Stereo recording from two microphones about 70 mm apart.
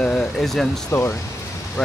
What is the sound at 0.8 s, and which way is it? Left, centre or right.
Speech, left.